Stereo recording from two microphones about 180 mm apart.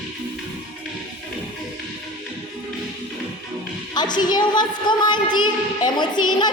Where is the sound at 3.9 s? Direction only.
25° left (ahead or behind).